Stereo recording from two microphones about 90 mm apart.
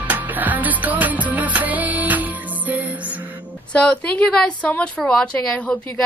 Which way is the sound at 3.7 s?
15° left (ahead or behind).